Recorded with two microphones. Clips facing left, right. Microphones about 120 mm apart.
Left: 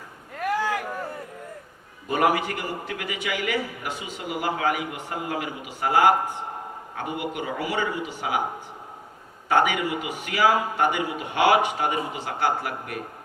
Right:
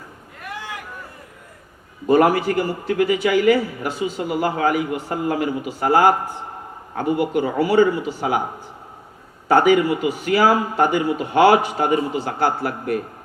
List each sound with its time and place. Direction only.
2.0 s a man's voice: 35° right (ahead or behind)
9.5 s a man's voice: 35° right (ahead or behind)